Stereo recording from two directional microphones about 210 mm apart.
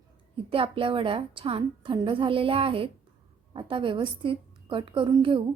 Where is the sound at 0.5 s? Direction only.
25° right (ahead or behind).